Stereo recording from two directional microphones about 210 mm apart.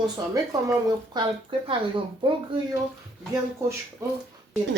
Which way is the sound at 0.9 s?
20° right (ahead or behind).